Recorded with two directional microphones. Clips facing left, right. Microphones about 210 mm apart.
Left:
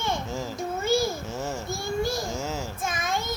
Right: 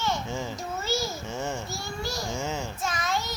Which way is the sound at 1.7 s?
50° left (ahead or behind).